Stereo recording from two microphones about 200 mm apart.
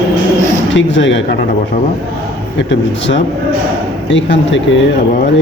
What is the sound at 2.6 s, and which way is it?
A man's voice, 65° left (ahead or behind).